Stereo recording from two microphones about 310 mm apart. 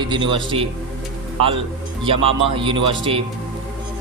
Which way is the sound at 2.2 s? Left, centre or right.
Centre.